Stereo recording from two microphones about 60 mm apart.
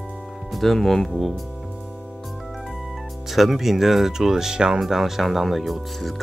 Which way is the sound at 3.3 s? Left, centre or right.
Centre.